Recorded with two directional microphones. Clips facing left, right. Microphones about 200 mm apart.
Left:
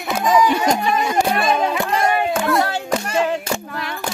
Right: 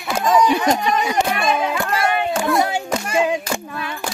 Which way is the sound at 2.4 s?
15° right (ahead or behind).